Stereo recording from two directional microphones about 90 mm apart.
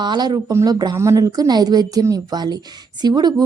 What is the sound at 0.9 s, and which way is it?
Speech, 35° right (ahead or behind).